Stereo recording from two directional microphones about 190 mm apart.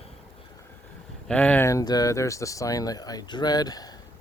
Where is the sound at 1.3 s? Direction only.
5° left (ahead or behind).